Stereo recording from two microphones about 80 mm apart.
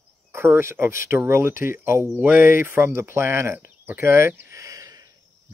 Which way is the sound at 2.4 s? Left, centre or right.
Right.